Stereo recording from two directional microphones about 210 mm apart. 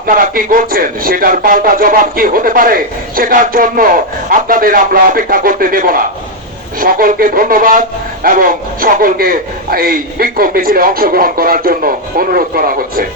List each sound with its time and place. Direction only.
0.1 s a man's voice: 40° right (ahead or behind)